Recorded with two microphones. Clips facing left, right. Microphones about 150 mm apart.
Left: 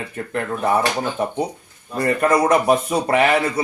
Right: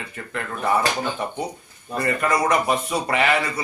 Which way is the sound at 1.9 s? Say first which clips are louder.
Left 5 dB; 30° left (ahead or behind).